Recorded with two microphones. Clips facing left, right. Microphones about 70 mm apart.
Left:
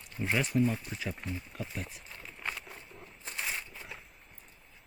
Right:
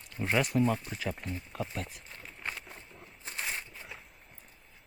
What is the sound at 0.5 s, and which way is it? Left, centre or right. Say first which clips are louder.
Speech: left 1 dB; right.